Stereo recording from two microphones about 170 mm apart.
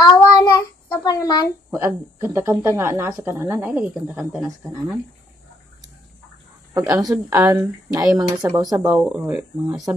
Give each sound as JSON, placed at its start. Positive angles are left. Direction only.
{"t": 0.0, "sound": "child singing", "side_deg": 25}
{"t": 1.7, "sound": "speech", "side_deg": -15}
{"t": 6.8, "sound": "speech", "side_deg": -5}
{"t": 8.8, "sound": "speech", "side_deg": -5}